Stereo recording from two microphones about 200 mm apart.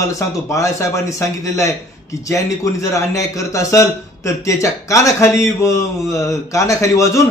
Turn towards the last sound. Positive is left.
turn(degrees=15)  # may be behind; listen again after turning